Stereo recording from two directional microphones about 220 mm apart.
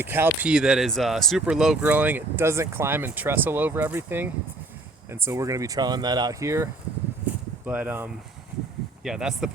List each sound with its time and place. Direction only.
0.0 s speech: 10° right (ahead or behind)